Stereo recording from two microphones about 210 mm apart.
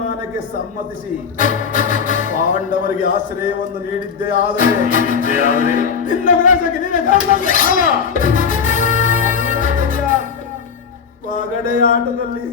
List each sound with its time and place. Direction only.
1.4 s music: 40° left (ahead or behind)
11.3 s music: 40° left (ahead or behind)